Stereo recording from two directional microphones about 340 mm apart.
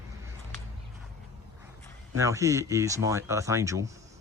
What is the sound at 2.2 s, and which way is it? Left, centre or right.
Speech, centre.